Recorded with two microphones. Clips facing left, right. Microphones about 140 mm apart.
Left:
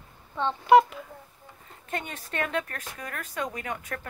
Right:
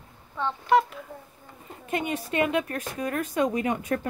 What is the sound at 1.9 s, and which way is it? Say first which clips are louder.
Speech: right 7 dB; 10° right (ahead or behind).